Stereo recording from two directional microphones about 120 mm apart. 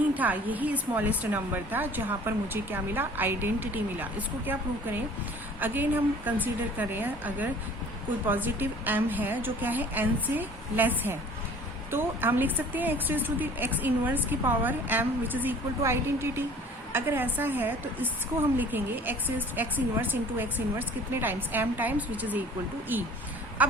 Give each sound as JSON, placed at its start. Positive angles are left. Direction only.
{"t": 0.2, "sound": "a woman's voice", "side_deg": -15}